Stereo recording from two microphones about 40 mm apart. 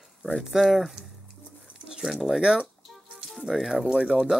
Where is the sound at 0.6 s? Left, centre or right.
Centre.